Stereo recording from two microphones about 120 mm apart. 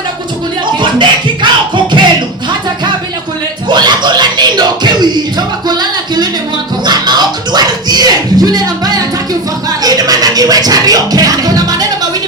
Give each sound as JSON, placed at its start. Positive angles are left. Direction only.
{"t": 0.6, "sound": "music", "side_deg": -40}
{"t": 3.7, "sound": "music", "side_deg": -40}